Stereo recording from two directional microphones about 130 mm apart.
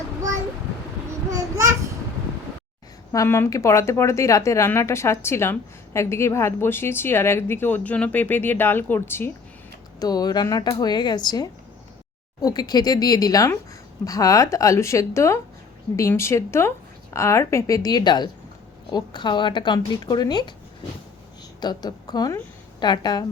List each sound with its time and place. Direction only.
1.3 s a sound: 25° right (ahead or behind)
3.1 s speech: 20° left (ahead or behind)
10.0 s speech: 30° left (ahead or behind)
21.6 s speech: 35° left (ahead or behind)